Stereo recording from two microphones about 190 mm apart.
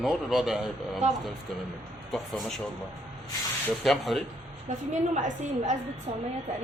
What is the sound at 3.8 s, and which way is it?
Speech, centre (ahead or behind).